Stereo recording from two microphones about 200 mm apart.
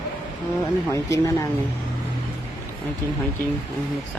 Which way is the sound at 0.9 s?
15° left (ahead or behind).